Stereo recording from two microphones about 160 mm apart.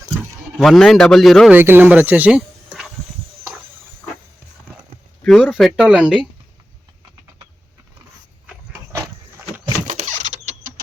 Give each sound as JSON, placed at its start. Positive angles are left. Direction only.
{"t": 0.6, "sound": "speech", "side_deg": 0}
{"t": 1.5, "sound": "speech", "side_deg": -10}
{"t": 5.2, "sound": "speech", "side_deg": 5}
{"t": 9.8, "sound": "power windows", "side_deg": -50}